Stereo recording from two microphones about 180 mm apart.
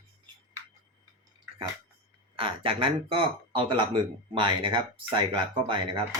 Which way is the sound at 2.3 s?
30° right (ahead or behind).